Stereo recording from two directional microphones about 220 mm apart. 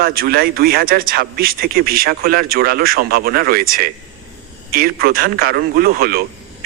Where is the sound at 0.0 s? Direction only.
45° right (ahead or behind).